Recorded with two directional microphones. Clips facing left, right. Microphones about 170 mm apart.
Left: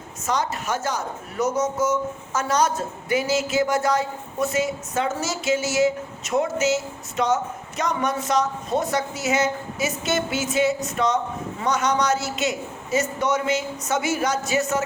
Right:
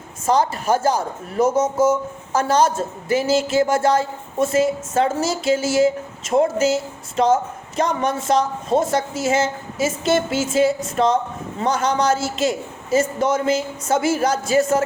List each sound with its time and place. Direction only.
0.3 s speech: 30° right (ahead or behind)